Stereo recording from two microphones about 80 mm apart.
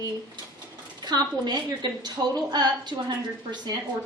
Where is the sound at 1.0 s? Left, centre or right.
Right.